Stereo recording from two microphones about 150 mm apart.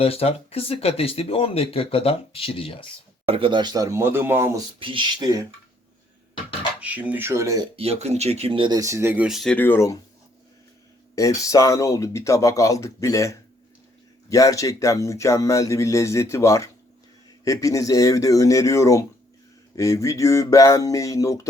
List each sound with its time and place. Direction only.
0.0 s speech: 40° left (ahead or behind)
3.2 s speech: 35° right (ahead or behind); by 4.6 s 15° right (ahead or behind)
4.8 s speech: 35° right (ahead or behind)
6.7 s speech: 10° right (ahead or behind)
7.8 s speech: 45° right (ahead or behind); by 9.6 s centre (ahead or behind)
9.6 s speech: 15° left (ahead or behind)
11.1 s speech: 20° left (ahead or behind)